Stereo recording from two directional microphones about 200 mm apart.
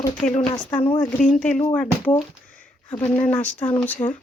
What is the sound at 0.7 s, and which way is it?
Speech, 5° left (ahead or behind).